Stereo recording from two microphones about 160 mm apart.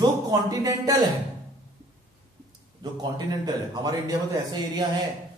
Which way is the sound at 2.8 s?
25° right (ahead or behind).